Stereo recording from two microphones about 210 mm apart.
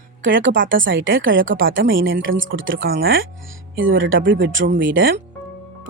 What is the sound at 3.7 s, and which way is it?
Speech, 65° right (ahead or behind).